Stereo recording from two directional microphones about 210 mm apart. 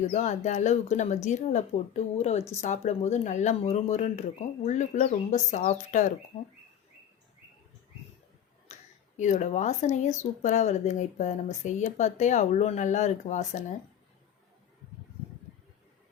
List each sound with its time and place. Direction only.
0.0 s speech: 35° left (ahead or behind)
8.6 s speech: 35° left (ahead or behind)